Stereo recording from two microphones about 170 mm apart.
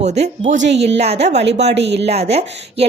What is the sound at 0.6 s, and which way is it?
Speech, 90° right.